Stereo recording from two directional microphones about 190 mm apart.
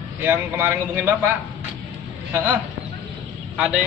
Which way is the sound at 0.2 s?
10° right (ahead or behind).